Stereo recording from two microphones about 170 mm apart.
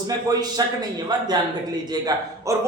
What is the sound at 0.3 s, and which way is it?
A man's voice, 20° right (ahead or behind).